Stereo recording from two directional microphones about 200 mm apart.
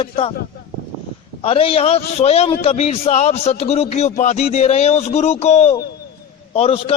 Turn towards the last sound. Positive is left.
turn(degrees=30)  # may be behind; listen again after turning